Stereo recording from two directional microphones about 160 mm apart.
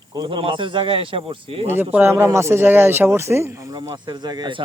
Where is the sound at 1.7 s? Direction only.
15° right (ahead or behind).